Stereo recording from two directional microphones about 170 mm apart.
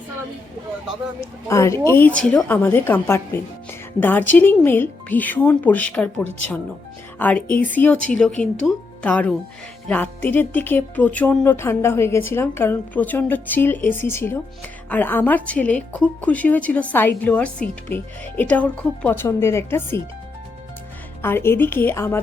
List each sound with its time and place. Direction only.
1.5 s speech: 15° left (ahead or behind)
7.2 s speech: 10° left (ahead or behind)
21.2 s speech: 15° left (ahead or behind)